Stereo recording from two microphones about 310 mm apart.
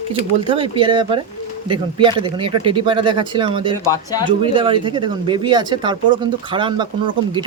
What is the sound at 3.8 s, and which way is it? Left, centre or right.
Speech, centre.